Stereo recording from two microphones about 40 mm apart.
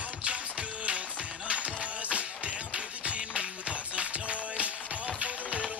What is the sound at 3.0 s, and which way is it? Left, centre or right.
Music, right.